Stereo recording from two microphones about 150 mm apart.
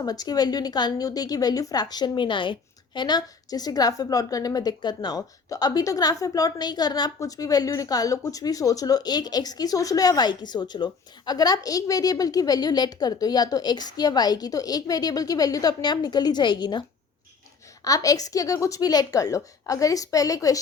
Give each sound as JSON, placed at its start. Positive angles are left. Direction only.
{"t": 0.0, "sound": "a woman's voice", "side_deg": 25}
{"t": 17.8, "sound": "a woman's voice", "side_deg": 25}